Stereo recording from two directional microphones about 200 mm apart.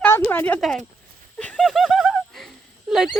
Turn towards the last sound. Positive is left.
turn(degrees=0)  # may be behind; listen again after turning